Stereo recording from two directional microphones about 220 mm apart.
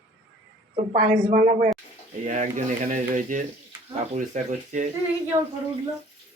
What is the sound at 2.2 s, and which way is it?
Speech, 35° right (ahead or behind).